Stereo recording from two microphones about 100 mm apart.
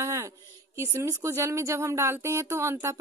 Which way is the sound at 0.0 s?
30° right (ahead or behind).